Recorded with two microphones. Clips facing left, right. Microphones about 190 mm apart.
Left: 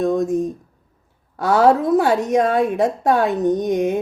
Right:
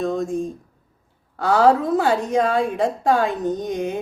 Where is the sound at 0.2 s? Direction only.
20° left (ahead or behind).